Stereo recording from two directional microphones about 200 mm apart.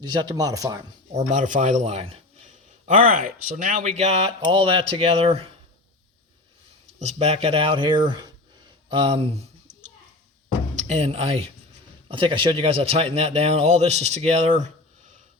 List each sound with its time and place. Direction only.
0.0 s speech: 20° right (ahead or behind)
1.1 s a man's voice: 35° right (ahead or behind)
3.1 s speech: 40° right (ahead or behind)
7.0 s speech: 35° right (ahead or behind)
10.8 s a man's voice: 30° right (ahead or behind)